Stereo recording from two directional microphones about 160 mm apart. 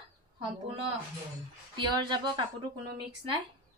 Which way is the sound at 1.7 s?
30° right (ahead or behind).